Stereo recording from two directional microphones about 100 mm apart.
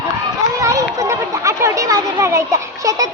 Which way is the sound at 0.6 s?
30° right (ahead or behind).